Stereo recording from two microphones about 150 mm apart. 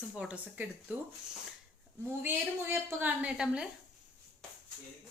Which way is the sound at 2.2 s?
15° right (ahead or behind).